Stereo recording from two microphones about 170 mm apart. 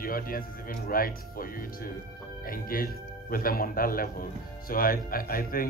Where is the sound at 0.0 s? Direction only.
60° left (ahead or behind).